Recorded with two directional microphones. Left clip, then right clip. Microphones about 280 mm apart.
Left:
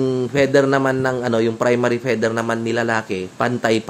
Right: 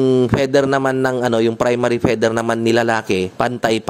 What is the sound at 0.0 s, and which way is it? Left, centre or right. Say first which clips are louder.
A man's voice: right 3 dB; right.